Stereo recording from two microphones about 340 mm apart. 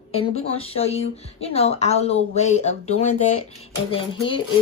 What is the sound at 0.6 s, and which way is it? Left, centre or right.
Speech, centre.